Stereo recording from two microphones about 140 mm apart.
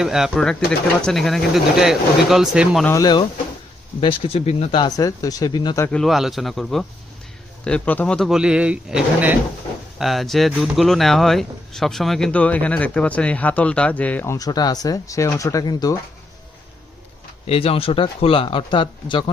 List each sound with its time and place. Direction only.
0.0 s speech: 5° right (ahead or behind)
2.8 s speech: 25° left (ahead or behind)
4.0 s speech: 40° left (ahead or behind)
4.8 s speech: 25° left (ahead or behind)
5.9 s speech: centre (ahead or behind)
14.3 s speech: 25° left (ahead or behind)
17.4 s speech: 45° left (ahead or behind)